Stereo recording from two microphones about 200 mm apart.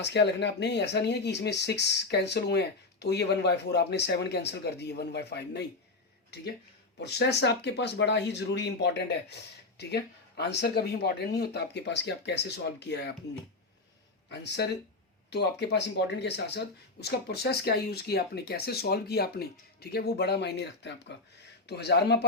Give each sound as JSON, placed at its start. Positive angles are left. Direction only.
{"t": 0.0, "sound": "speech", "side_deg": 60}
{"t": 7.0, "sound": "speech", "side_deg": 55}
{"t": 14.3, "sound": "speech", "side_deg": 55}